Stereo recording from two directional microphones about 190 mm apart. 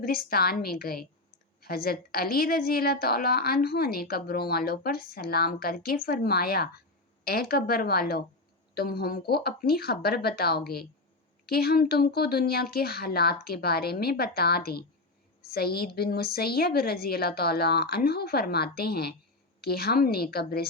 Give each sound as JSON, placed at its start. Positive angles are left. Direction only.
{"t": 0.0, "sound": "a woman's voice", "side_deg": 50}